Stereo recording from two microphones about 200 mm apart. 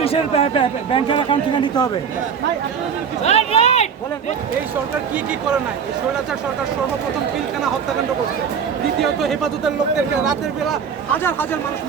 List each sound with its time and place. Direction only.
0.0 s a man's voice: 30° left (ahead or behind)
3.2 s speech: 30° left (ahead or behind)
9.0 s speech: centre (ahead or behind)
11.2 s speech: 10° left (ahead or behind)